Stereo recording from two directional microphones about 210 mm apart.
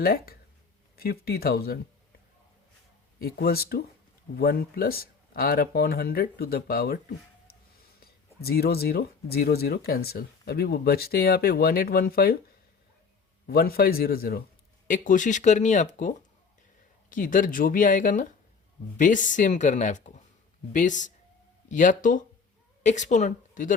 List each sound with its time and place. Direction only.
0.0 s speech: 45° left (ahead or behind)
3.2 s speech: 45° left (ahead or behind)
8.4 s speech: 50° left (ahead or behind)
13.5 s a woman's voice: 45° left (ahead or behind)